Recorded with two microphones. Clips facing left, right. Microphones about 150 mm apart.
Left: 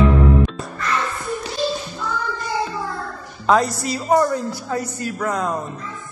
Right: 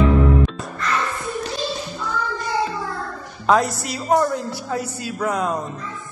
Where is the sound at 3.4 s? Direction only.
Centre (ahead or behind).